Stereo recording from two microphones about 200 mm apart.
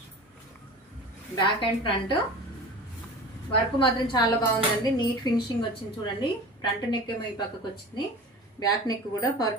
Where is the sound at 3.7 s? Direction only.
25° left (ahead or behind).